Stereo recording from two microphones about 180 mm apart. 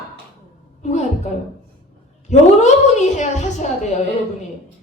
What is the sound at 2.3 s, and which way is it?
A woman's voice, 40° left (ahead or behind).